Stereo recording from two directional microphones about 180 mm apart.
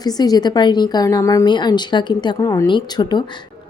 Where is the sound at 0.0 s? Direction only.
20° left (ahead or behind).